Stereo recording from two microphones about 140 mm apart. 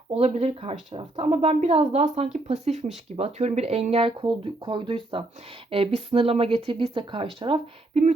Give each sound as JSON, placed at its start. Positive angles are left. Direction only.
{"t": 0.1, "sound": "a woman's voice", "side_deg": -50}
{"t": 4.2, "sound": "speech", "side_deg": -35}